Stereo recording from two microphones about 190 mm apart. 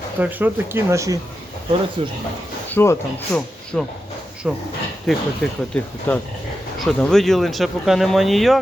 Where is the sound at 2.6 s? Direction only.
15° left (ahead or behind).